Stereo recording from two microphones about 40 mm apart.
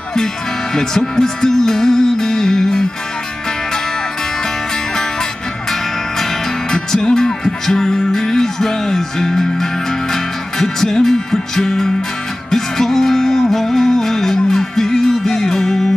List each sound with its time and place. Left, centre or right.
0.7 s music: centre
6.7 s music: centre